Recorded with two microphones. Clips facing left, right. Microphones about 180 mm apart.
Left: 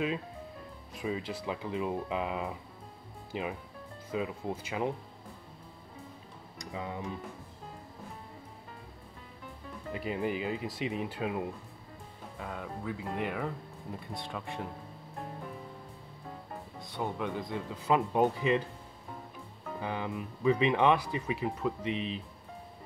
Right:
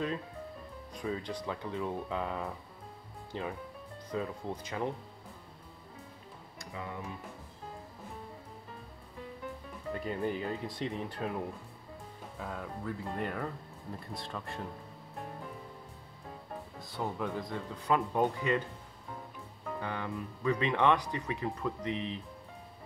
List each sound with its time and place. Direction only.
1.0 s speech: 10° left (ahead or behind)
6.6 s speech: 20° left (ahead or behind)
9.9 s speech: 10° left (ahead or behind)
16.8 s speech: centre (ahead or behind)
17.8 s speech: 20° left (ahead or behind)
19.8 s speech: 15° left (ahead or behind)